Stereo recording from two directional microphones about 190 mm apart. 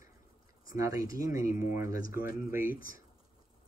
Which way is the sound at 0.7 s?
20° right (ahead or behind).